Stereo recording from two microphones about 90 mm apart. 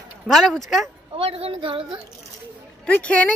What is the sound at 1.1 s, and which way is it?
Speech, 90° right.